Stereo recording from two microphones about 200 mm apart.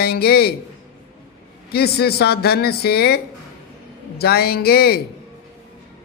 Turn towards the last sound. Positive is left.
turn(degrees=50)  # may be behind; listen again after turning